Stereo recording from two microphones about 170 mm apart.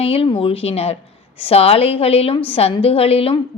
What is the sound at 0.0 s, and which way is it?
A woman's voice, 35° left (ahead or behind).